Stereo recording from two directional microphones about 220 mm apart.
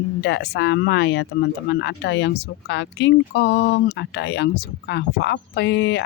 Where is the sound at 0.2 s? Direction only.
55° left (ahead or behind).